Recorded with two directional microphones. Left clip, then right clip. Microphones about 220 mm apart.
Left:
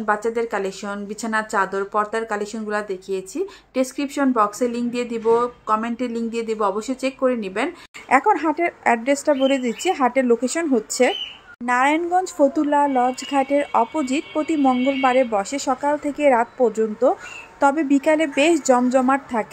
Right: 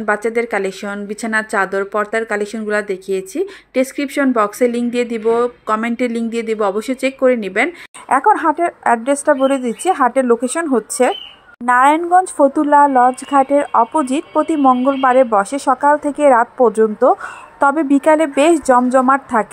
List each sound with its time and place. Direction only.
0.0 s a woman's voice: 15° right (ahead or behind)